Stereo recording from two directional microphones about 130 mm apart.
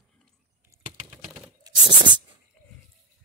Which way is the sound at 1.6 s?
35° right (ahead or behind).